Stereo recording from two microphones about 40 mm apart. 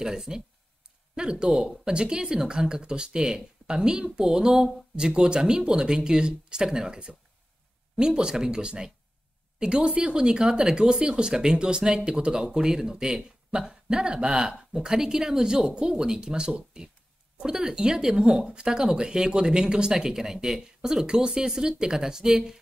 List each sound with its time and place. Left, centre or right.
0.0 s speech: centre
1.1 s speech: right